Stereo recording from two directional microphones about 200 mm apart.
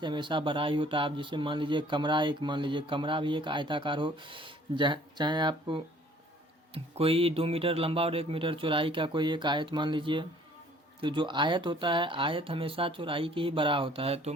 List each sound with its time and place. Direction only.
0.0 s speech: 25° right (ahead or behind)